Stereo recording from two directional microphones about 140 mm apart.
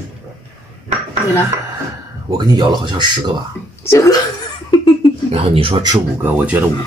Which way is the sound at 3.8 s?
25° left (ahead or behind).